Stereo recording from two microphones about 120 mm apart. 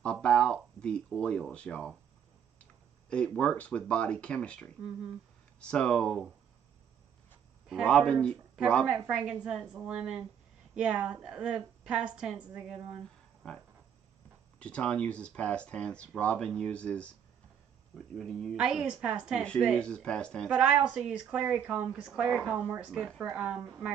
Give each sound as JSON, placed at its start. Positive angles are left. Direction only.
{"t": 0.0, "sound": "a sound", "side_deg": 10}
{"t": 3.1, "sound": "speech", "side_deg": 10}
{"t": 7.8, "sound": "speech", "side_deg": 10}
{"t": 8.8, "sound": "a woman's voice", "side_deg": -5}
{"t": 14.6, "sound": "a woman's voice", "side_deg": 10}
{"t": 19.4, "sound": "speech", "side_deg": 5}
{"t": 20.5, "sound": "a woman's voice", "side_deg": -10}
{"t": 22.6, "sound": "a woman's voice", "side_deg": -15}